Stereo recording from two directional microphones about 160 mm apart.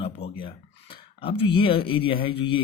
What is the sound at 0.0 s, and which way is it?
Speech, 35° left (ahead or behind).